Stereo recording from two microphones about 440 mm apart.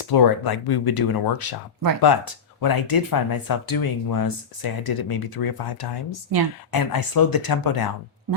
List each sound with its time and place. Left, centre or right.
0.0 s speech: left